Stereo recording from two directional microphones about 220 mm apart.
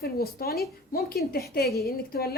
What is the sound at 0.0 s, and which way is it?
Speech, 45° left (ahead or behind).